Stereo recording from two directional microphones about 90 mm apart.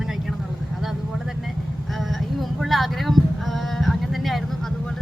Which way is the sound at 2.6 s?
Centre (ahead or behind).